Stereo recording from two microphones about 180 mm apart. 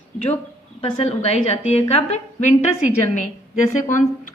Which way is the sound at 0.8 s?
30° left (ahead or behind).